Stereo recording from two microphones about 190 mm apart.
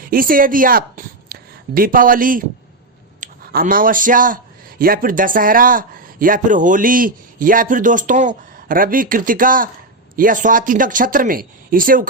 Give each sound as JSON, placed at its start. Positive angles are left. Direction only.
{"t": 0.0, "sound": "a woman's voice", "side_deg": -50}